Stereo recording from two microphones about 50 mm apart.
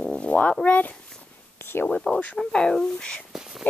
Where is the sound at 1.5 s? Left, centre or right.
Left.